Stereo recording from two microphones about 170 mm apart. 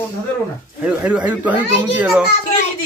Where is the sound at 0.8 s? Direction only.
5° right (ahead or behind).